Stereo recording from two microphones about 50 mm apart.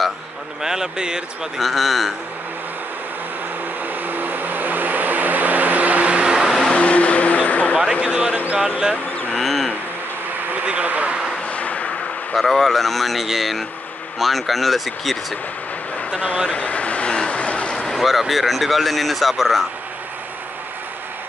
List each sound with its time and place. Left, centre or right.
0.6 s speech: centre
1.6 s speech: centre
3.8 s vehicle: right; by 6.5 s centre
6.7 s vehicle: left
7.7 s speech: centre
9.3 s bird: centre
10.5 s speech: right
11.4 s a sound: left
12.4 s speech: centre
16.5 s vehicle: left
17.9 s speech: centre